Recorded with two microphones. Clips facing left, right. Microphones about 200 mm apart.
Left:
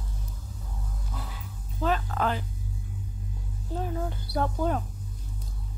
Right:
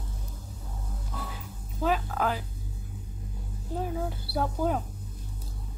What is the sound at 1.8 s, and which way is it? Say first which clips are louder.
Speech: even; 10° right (ahead or behind).